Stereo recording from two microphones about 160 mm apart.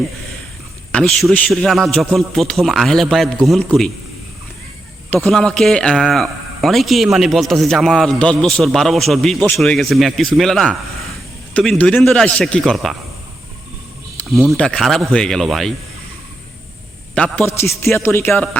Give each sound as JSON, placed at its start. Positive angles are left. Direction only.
{"t": 0.9, "sound": "a man's voice", "side_deg": 5}
{"t": 5.1, "sound": "a man's voice", "side_deg": 5}
{"t": 14.3, "sound": "a man's voice", "side_deg": 0}
{"t": 17.2, "sound": "speech", "side_deg": 10}